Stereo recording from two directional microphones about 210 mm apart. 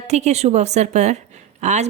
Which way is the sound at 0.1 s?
30° right (ahead or behind).